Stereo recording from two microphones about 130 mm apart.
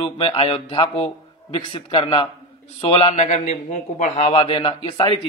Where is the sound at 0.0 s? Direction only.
45° left (ahead or behind).